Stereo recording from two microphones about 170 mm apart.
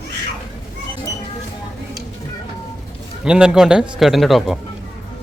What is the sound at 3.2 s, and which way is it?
A man's voice, 5° right (ahead or behind).